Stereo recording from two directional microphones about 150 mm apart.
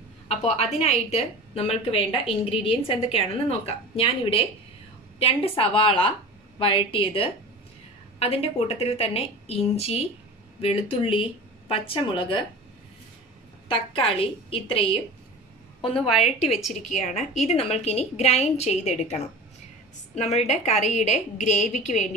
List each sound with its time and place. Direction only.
0.3 s a woman's voice: 45° left (ahead or behind)
13.7 s a woman's voice: 35° left (ahead or behind)
16.9 s a woman's voice: 50° left (ahead or behind)